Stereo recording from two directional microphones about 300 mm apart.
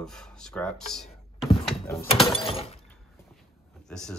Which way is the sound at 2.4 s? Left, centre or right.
Centre.